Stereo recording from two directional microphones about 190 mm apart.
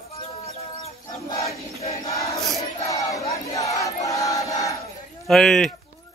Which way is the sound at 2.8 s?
15° left (ahead or behind).